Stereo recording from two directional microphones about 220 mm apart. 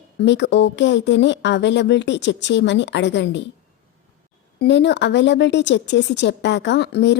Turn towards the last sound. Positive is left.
turn(degrees=50)  # may be behind; listen again after turning